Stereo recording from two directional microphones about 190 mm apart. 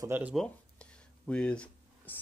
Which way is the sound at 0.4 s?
5° left (ahead or behind).